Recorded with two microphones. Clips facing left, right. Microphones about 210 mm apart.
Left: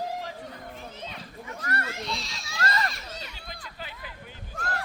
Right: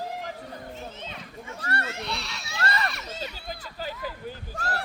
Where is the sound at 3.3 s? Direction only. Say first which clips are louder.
Right 5 dB; 40° right (ahead or behind).